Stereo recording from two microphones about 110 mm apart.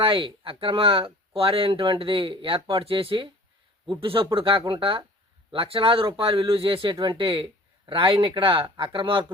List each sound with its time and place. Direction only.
0.0 s speech: 55° right (ahead or behind)